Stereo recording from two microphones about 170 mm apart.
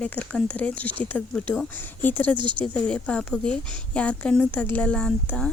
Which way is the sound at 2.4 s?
30° right (ahead or behind).